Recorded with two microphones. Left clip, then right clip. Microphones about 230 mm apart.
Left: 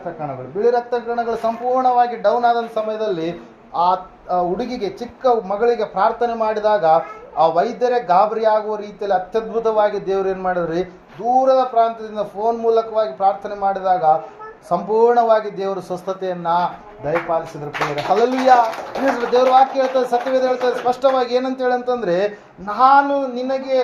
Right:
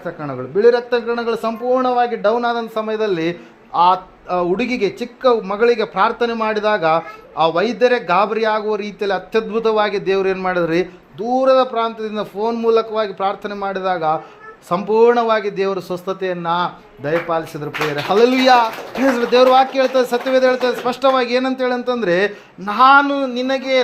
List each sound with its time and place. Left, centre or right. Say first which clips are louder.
0.6 s a man's voice: right 4 dB; right
18.1 s a man's voice: right 2 dB; right